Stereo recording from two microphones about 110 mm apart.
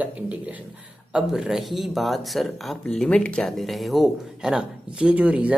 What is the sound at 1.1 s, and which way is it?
Speech, 5° right (ahead or behind).